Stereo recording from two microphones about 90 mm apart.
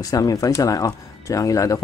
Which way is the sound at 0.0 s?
40° left (ahead or behind).